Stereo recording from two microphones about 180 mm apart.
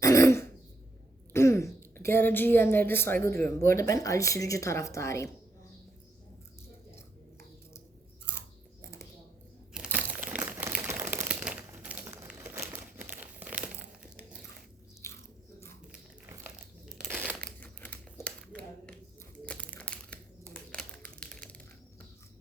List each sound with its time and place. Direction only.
0.0 s throat clearing: 15° left (ahead or behind)
1.3 s a woman's voice: 15° left (ahead or behind)
8.2 s chewing: 15° left (ahead or behind)
9.7 s crumpling: 5° right (ahead or behind)
14.0 s a sound: 5° right (ahead or behind)
15.0 s biting: 15° left (ahead or behind)
16.9 s crumpling: centre (ahead or behind)
20.7 s a sound: 5° left (ahead or behind)